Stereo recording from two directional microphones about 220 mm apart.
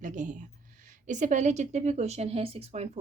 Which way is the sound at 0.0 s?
35° right (ahead or behind).